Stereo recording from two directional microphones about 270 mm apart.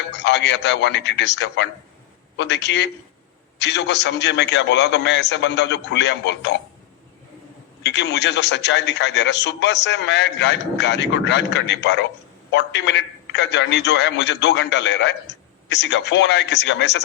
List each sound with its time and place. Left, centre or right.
0.1 s a man's voice: left
7.9 s a man's voice: left